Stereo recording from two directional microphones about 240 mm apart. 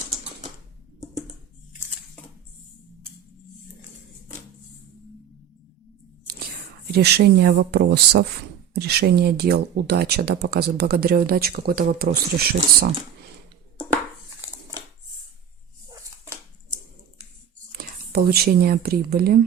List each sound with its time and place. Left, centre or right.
6.9 s speech: right
15.9 s a sound: centre
17.7 s speech: right